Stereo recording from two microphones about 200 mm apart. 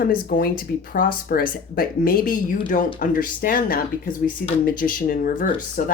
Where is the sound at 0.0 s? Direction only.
45° left (ahead or behind).